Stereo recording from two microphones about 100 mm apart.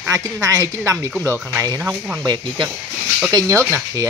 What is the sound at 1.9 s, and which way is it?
Speech, 10° right (ahead or behind).